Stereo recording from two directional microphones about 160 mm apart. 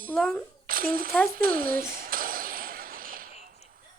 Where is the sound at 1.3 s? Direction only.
65° right (ahead or behind).